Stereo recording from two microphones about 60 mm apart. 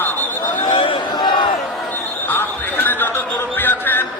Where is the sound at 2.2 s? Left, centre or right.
Left.